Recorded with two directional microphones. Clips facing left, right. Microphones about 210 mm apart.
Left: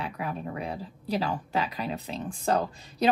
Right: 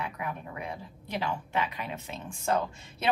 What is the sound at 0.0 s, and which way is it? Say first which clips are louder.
Speech: left 3 dB; 35° left (ahead or behind).